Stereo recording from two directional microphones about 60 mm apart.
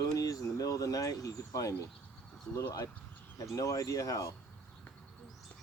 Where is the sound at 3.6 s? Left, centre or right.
Left.